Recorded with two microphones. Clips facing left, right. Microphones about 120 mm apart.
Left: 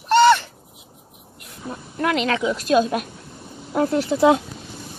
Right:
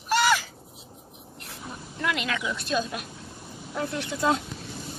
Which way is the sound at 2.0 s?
50° left (ahead or behind).